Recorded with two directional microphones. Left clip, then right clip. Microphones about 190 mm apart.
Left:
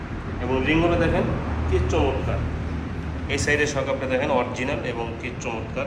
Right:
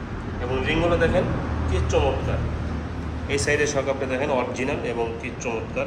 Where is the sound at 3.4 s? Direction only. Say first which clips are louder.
Even; 15° right (ahead or behind).